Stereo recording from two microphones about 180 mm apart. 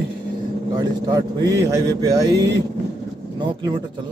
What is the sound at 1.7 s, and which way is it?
Speech, 20° right (ahead or behind).